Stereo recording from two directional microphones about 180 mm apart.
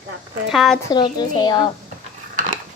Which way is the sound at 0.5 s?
Centre (ahead or behind).